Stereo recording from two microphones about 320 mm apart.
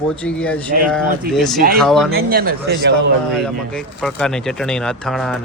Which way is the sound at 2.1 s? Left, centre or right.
Right.